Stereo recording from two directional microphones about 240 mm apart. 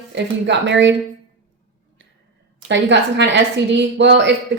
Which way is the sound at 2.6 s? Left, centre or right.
Right.